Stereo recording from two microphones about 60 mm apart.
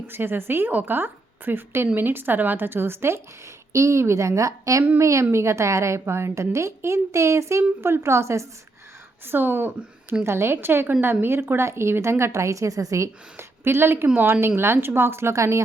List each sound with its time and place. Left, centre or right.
0.1 s a woman's voice: right
3.7 s a woman's voice: right
9.2 s a woman's voice: right
13.3 s a woman's voice: right